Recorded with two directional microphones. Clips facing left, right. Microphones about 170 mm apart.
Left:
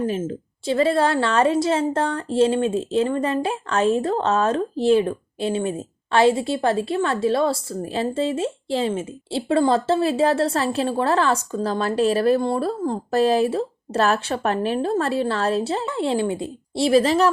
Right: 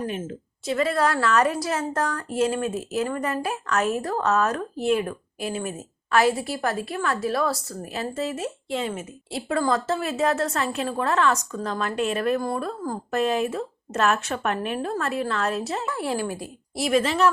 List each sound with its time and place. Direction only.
0.1 s a woman's voice: 30° left (ahead or behind)